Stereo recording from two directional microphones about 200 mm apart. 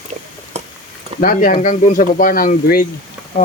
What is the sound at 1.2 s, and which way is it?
Speech, 45° left (ahead or behind).